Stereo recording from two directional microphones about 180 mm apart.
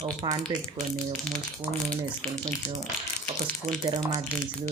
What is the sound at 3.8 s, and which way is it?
Speech, 25° right (ahead or behind).